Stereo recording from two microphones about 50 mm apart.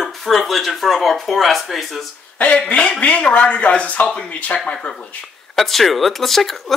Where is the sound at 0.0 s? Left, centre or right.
Centre.